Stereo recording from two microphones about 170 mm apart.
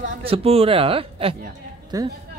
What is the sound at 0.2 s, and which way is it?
A man's voice, 35° right (ahead or behind).